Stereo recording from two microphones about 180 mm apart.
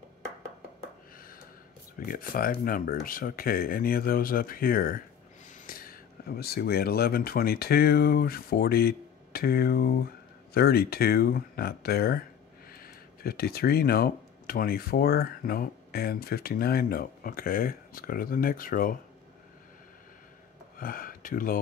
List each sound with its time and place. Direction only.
2.0 s speech: 55° left (ahead or behind)
20.7 s speech: 50° left (ahead or behind)